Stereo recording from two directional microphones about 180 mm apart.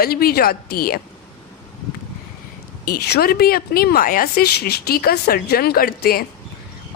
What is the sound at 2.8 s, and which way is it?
Speech, 60° left (ahead or behind).